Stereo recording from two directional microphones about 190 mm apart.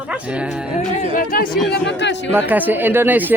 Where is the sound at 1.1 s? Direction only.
45° left (ahead or behind).